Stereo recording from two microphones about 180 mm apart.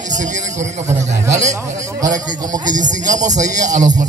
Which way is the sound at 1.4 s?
20° right (ahead or behind).